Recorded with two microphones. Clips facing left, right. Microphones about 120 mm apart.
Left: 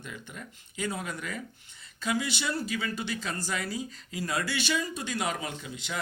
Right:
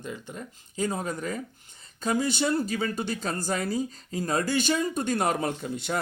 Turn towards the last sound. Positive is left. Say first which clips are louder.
# right 8 dB
turn(degrees=-50)  # may be behind; listen again after turning